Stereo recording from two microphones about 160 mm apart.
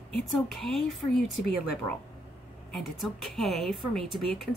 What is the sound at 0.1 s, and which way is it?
A woman's voice, centre (ahead or behind).